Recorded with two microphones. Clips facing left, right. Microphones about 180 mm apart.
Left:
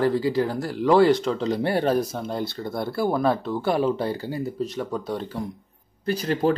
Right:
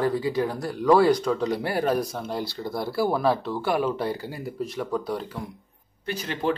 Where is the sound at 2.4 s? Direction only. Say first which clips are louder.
Left 1 dB; 55° left (ahead or behind).